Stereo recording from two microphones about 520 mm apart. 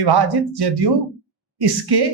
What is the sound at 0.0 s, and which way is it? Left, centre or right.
Speech, right.